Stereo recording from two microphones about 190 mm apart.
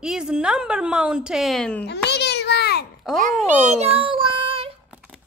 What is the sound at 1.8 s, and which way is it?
Babbling, 60° left (ahead or behind).